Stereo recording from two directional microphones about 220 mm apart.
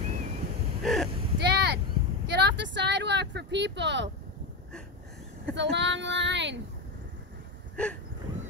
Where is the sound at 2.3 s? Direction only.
50° right (ahead or behind).